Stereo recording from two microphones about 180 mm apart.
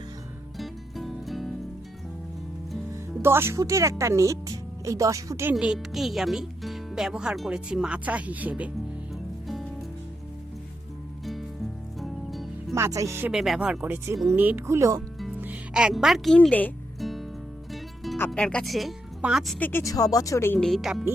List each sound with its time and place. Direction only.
0.5 s music: centre (ahead or behind)
2.9 s speech: 15° right (ahead or behind)
5.5 s speech: 5° right (ahead or behind)
11.9 s music: centre (ahead or behind)
12.7 s speech: 15° right (ahead or behind)
15.4 s music: 10° right (ahead or behind)
18.3 s speech: 5° left (ahead or behind)
19.5 s speech: 10° left (ahead or behind)
20.7 s speech: centre (ahead or behind)